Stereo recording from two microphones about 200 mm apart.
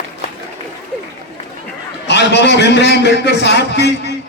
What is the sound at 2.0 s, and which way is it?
A man's voice, 60° left (ahead or behind).